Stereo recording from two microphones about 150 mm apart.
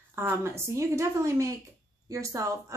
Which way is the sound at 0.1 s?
15° right (ahead or behind).